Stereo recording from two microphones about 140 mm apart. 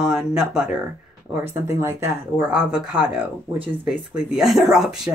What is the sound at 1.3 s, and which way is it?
Speech, 20° right (ahead or behind).